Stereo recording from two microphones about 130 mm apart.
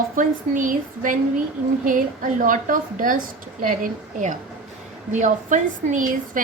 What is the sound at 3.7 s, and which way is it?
A woman's voice, 80° right.